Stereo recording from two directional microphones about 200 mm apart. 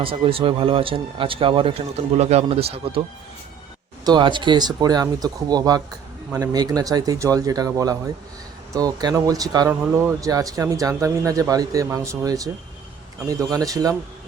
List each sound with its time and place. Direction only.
0.0 s speech: 25° right (ahead or behind)
4.0 s speech: 25° right (ahead or behind)